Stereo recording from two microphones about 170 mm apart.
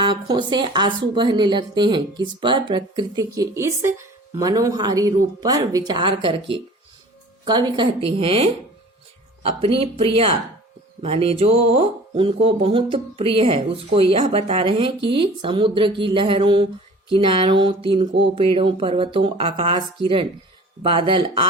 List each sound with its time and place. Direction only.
0.0 s a woman's voice: 25° right (ahead or behind)